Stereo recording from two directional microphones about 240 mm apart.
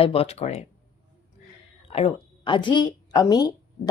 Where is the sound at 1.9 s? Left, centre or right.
Left.